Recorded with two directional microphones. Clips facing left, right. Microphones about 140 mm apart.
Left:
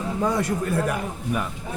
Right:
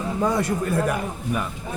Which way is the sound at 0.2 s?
35° right (ahead or behind).